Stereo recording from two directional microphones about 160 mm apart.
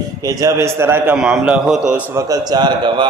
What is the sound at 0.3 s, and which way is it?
A man's voice, 20° right (ahead or behind).